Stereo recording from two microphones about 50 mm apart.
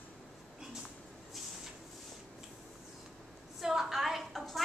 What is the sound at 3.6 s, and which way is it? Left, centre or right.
Speech, centre.